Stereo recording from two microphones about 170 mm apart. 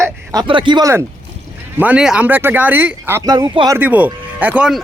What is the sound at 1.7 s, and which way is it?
Speech, 10° right (ahead or behind).